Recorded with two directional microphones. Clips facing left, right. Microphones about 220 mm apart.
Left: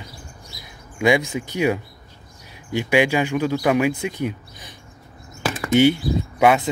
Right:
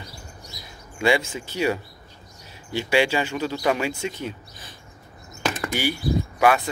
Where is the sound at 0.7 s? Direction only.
15° left (ahead or behind).